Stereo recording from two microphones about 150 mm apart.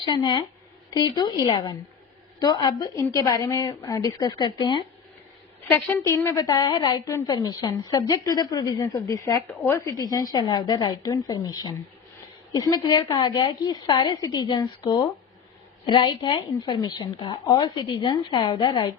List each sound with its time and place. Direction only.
0.0 s a woman's voice: 30° left (ahead or behind)
6.0 s a woman's voice: 20° left (ahead or behind)
9.5 s speech: 15° left (ahead or behind)
9.9 s a woman's voice: 25° left (ahead or behind)